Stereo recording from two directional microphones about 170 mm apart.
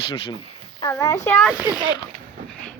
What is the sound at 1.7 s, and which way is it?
Speech, 25° left (ahead or behind).